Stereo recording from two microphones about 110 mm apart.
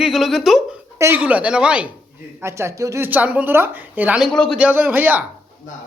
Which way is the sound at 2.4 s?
25° right (ahead or behind).